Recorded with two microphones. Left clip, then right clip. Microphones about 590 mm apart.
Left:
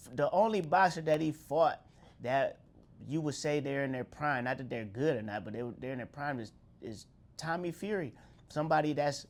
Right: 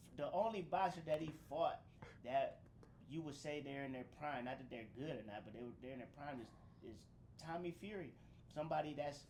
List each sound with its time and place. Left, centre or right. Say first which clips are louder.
0.0 s speech: left 12 dB; left